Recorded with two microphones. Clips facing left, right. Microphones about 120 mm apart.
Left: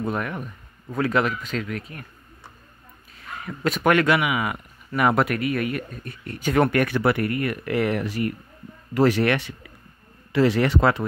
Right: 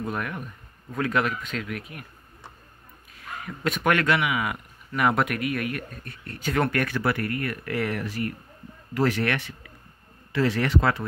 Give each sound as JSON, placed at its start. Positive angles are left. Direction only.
{"t": 0.0, "sound": "speech", "side_deg": 0}
{"t": 3.4, "sound": "speech", "side_deg": 0}